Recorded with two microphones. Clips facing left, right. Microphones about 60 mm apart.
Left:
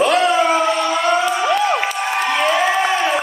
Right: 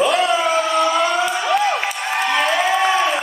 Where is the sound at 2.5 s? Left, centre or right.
Left.